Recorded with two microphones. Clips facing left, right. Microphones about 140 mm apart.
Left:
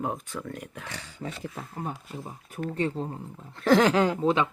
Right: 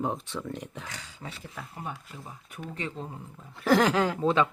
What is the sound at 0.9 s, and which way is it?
Speech, 45° left (ahead or behind).